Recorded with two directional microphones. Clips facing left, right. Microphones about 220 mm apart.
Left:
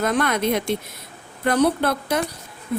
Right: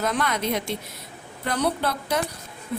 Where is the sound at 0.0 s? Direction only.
50° left (ahead or behind).